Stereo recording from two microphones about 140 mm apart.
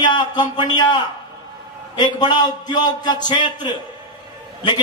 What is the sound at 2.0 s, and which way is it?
A man's voice, 30° left (ahead or behind).